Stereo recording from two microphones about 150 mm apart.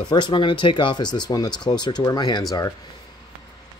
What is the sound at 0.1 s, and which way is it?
Speech, 30° left (ahead or behind).